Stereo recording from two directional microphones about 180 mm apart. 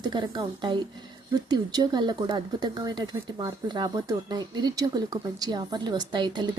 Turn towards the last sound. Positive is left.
turn(degrees=-25)  # may be behind; listen again after turning